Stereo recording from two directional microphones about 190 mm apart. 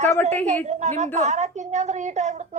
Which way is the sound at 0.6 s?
40° right (ahead or behind).